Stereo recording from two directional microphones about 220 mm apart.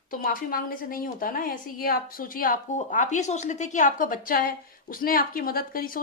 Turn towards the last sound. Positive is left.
turn(degrees=40)  # may be behind; listen again after turning